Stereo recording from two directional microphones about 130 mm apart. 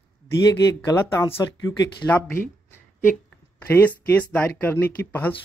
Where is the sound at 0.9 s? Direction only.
35° left (ahead or behind).